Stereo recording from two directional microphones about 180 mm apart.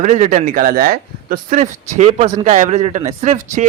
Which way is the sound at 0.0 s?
40° right (ahead or behind).